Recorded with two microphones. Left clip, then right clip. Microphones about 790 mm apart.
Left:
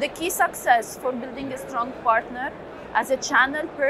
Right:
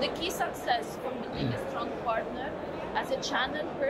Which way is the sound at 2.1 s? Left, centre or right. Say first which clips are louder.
Left 11 dB; left.